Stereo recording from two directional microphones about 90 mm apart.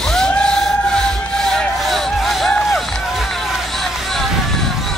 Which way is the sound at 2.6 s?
Centre (ahead or behind).